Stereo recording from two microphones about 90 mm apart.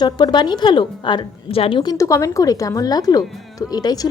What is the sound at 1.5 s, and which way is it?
Speech, 85° left.